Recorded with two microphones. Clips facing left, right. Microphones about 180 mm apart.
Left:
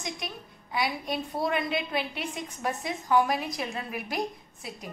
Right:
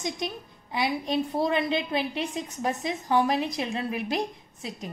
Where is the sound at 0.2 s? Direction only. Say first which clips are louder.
Right 6 dB; 25° right (ahead or behind).